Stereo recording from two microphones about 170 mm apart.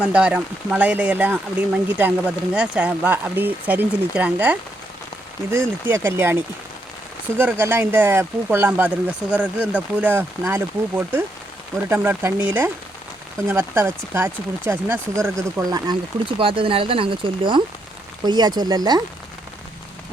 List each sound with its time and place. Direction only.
0.0 s speech: 5° right (ahead or behind)
7.6 s speech: 10° right (ahead or behind)